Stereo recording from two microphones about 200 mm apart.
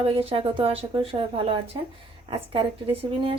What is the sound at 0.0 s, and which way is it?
Speech, 30° right (ahead or behind).